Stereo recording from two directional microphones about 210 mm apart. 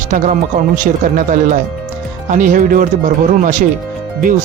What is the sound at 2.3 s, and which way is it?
Speech, 40° right (ahead or behind).